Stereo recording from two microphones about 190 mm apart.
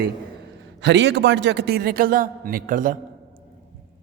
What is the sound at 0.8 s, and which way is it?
A man's voice, 65° right (ahead or behind).